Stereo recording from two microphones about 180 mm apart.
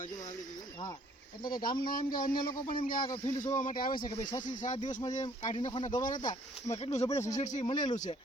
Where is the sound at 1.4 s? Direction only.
50° left (ahead or behind).